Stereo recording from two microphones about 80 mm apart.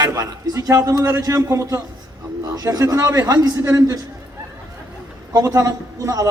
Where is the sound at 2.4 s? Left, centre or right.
Right.